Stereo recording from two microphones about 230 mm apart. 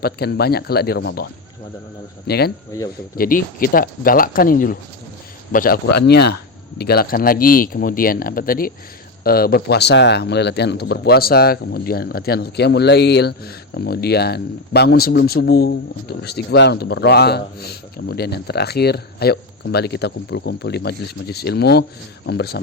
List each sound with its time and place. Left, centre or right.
0.0 s speech: left
2.7 s speech: centre
3.2 s speech: left